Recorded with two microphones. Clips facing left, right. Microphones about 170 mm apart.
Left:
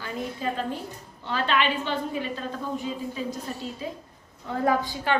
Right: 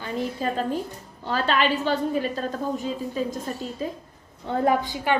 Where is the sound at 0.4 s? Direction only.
40° right (ahead or behind).